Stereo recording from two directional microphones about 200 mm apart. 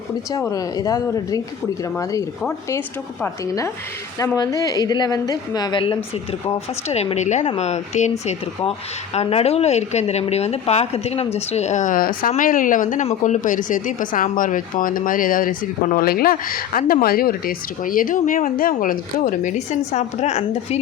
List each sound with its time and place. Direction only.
0.3 s a woman's voice: 15° left (ahead or behind); by 8.1 s 35° left (ahead or behind)
9.1 s a woman's voice: 30° left (ahead or behind)